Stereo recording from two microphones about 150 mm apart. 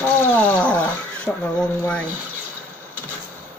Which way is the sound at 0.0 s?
10° left (ahead or behind).